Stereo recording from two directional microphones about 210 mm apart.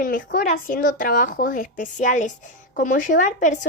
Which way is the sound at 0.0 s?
40° left (ahead or behind).